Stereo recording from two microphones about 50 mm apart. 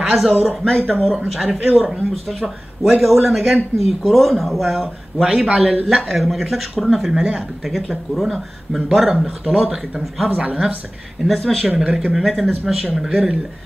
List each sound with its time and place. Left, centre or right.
0.0 s speech: centre
10.3 s speech: right
11.2 s speech: centre